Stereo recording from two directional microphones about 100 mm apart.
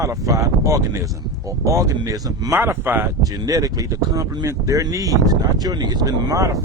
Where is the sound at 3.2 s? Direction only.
35° right (ahead or behind).